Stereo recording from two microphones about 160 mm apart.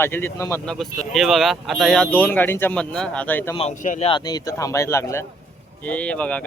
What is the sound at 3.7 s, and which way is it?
Speech, 55° left (ahead or behind).